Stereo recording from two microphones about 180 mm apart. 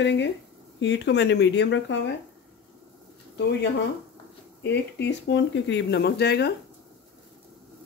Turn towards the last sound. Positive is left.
turn(degrees=65)  # may be behind; listen again after turning